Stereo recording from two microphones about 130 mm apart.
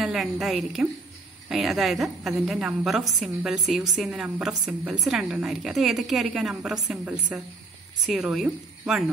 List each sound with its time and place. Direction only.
0.0 s a woman's voice: 5° right (ahead or behind)